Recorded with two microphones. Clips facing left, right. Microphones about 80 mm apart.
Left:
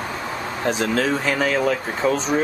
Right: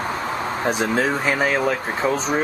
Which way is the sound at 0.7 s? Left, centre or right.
Centre.